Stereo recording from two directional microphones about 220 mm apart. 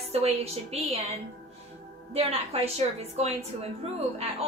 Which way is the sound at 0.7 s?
30° right (ahead or behind).